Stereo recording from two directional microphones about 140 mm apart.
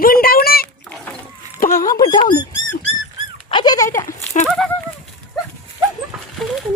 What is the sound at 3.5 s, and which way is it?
Dog, 30° left (ahead or behind).